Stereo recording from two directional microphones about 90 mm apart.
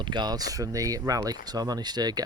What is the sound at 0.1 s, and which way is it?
Speech, 50° right (ahead or behind).